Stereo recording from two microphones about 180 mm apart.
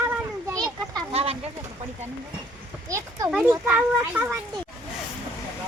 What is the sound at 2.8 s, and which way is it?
Speech, 20° right (ahead or behind).